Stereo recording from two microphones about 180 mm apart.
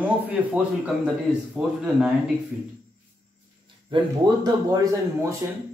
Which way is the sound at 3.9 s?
20° right (ahead or behind).